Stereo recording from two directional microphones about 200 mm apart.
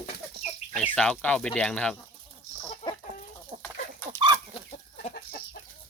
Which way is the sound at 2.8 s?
35° left (ahead or behind).